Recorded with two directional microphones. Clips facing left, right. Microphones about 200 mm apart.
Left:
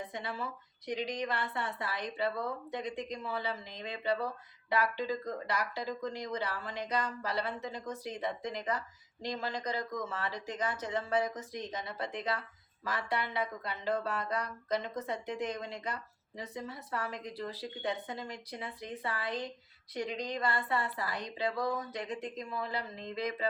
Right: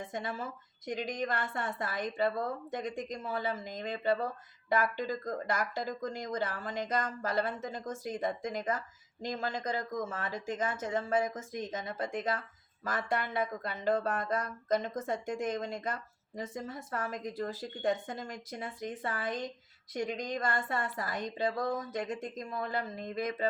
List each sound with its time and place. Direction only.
0.1 s speech: 45° right (ahead or behind)